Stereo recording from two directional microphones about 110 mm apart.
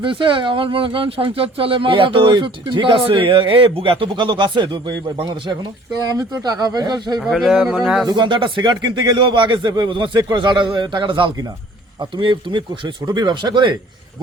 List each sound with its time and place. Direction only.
0.0 s speech: 50° right (ahead or behind)
7.2 s speech: centre (ahead or behind)
8.0 s speech: 45° right (ahead or behind)